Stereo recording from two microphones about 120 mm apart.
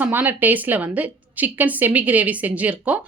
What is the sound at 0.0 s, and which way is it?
A woman's voice, 15° right (ahead or behind).